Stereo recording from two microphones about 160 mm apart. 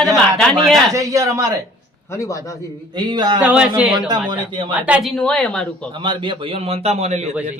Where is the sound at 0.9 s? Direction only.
20° right (ahead or behind).